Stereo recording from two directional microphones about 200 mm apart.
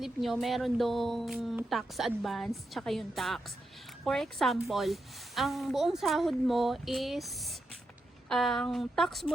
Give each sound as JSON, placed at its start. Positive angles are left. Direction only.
{"t": 0.0, "sound": "speech", "side_deg": 0}